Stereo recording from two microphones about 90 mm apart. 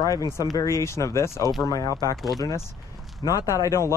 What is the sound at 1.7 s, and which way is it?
Speech, 45° left (ahead or behind).